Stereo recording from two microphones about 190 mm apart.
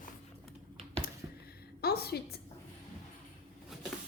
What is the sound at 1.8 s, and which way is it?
Speech, 55° left (ahead or behind).